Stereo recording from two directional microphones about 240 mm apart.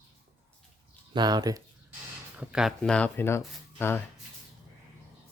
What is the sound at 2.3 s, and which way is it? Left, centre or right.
Speech, centre.